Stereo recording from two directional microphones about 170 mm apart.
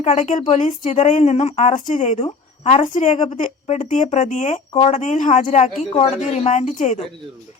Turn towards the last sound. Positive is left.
turn(degrees=45)  # may be behind; listen again after turning